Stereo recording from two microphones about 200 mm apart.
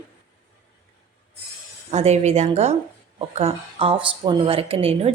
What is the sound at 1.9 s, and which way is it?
Speech, 35° right (ahead or behind).